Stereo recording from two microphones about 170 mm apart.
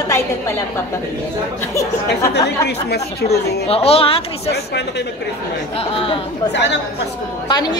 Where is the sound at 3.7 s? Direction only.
35° left (ahead or behind).